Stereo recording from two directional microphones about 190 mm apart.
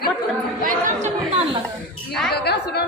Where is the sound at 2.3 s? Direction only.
60° left (ahead or behind).